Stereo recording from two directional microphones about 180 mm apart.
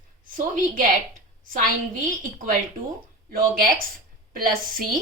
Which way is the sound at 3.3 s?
50° right (ahead or behind).